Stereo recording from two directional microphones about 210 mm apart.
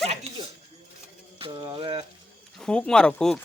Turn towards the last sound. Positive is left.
turn(degrees=5)  # may be behind; listen again after turning